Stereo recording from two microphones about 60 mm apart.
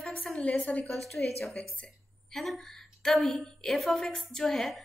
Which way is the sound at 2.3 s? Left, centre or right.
Centre.